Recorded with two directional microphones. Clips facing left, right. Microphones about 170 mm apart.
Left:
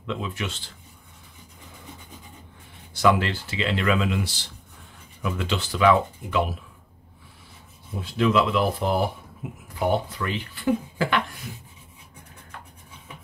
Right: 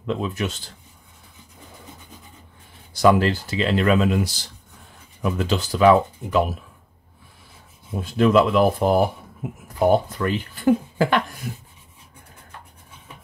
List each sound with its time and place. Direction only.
0.0 s speech: 40° right (ahead or behind)
2.9 s speech: 40° right (ahead or behind)
8.0 s speech: 45° right (ahead or behind)